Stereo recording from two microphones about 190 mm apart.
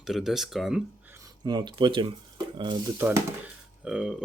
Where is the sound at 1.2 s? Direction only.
20° right (ahead or behind).